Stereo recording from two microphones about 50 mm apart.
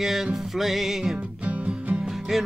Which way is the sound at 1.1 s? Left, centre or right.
Right.